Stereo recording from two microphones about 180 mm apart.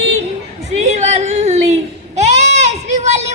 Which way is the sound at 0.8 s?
40° right (ahead or behind).